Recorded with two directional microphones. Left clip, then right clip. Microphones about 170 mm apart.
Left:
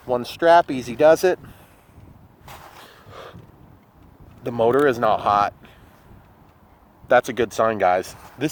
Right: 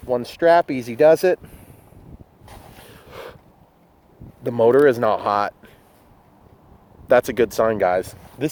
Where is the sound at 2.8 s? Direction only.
35° right (ahead or behind).